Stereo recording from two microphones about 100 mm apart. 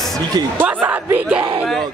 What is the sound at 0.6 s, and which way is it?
Speech, 15° right (ahead or behind).